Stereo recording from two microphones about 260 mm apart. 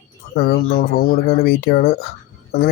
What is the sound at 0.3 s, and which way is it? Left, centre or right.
Speech, left.